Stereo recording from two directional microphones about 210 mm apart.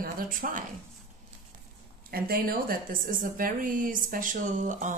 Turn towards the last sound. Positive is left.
turn(degrees=-35)  # may be behind; listen again after turning